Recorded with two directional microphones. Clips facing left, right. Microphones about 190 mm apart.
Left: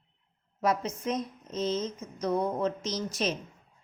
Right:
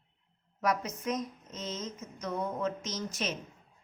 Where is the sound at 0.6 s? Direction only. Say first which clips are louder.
Left 3 dB; 25° left (ahead or behind).